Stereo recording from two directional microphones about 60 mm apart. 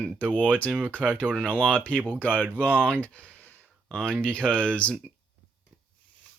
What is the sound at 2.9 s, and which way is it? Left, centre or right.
Speech, left.